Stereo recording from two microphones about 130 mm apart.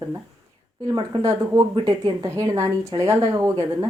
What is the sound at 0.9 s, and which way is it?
A woman's voice, 30° right (ahead or behind).